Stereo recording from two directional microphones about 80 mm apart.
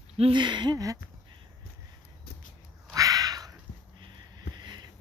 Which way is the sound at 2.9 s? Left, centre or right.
Right.